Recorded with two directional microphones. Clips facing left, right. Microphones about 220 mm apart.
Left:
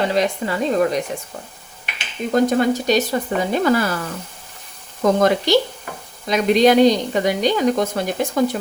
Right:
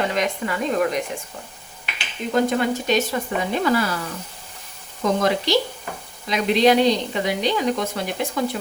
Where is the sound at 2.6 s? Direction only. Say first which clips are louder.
Left 4 dB; 35° left (ahead or behind).